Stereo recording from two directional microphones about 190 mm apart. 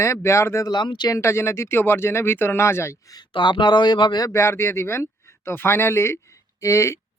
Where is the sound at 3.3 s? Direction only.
25° left (ahead or behind).